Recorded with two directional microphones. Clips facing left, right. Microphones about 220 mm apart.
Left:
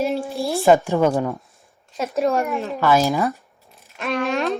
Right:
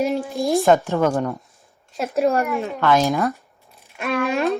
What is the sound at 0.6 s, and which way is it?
Speech, 10° left (ahead or behind).